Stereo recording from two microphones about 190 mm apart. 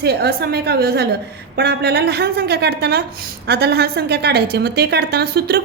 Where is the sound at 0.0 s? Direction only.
55° right (ahead or behind).